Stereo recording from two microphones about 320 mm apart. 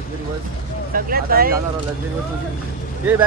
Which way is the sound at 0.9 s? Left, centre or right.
Right.